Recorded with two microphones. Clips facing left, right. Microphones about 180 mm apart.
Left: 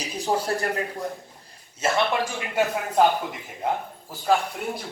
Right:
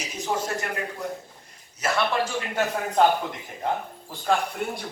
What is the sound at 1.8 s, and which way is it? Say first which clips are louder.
Speech: left 2 dB; 25° left (ahead or behind).